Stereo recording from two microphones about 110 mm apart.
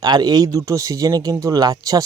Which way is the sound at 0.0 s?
35° right (ahead or behind).